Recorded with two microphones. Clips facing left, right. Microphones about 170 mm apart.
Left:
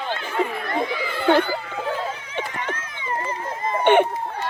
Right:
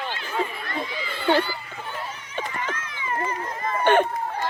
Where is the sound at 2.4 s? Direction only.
60° left (ahead or behind).